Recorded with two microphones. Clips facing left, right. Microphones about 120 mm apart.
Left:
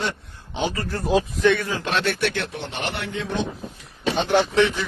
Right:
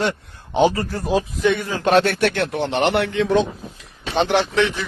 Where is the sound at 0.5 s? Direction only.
45° right (ahead or behind).